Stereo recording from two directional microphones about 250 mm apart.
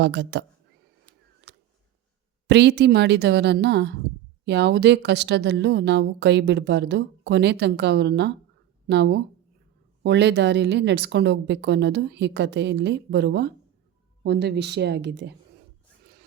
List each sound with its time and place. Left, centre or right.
0.0 s speech: right
2.5 s speech: right